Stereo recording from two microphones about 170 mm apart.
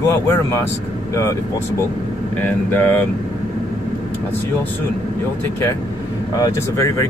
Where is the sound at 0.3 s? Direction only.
15° left (ahead or behind).